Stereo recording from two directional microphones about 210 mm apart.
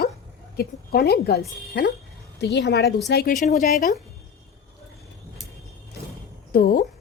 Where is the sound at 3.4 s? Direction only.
40° left (ahead or behind).